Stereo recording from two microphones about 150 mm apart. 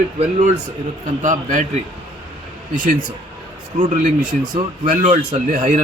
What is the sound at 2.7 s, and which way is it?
Speech, 65° right (ahead or behind).